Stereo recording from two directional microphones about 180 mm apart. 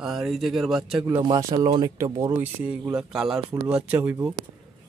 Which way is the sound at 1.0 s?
20° right (ahead or behind).